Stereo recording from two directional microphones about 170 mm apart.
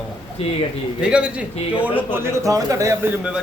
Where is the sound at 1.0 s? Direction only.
5° right (ahead or behind).